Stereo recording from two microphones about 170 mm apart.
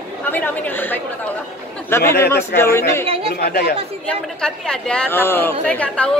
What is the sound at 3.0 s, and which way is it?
Speech, 35° right (ahead or behind).